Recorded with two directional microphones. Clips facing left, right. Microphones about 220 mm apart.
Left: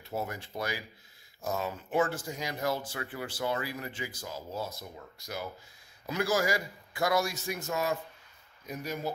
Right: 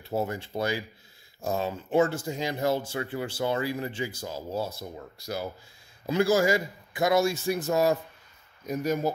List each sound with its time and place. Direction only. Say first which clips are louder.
0.1 s speech: right 6 dB; 30° right (ahead or behind); by 9.1 s 45° right (ahead or behind)